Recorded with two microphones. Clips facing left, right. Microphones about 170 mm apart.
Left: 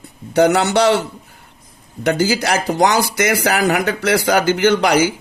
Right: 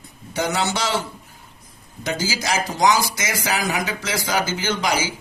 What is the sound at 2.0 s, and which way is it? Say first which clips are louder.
Speech: left 8 dB; 60° left (ahead or behind).